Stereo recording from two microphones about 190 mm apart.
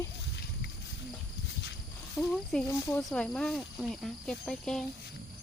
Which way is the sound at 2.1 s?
Centre (ahead or behind).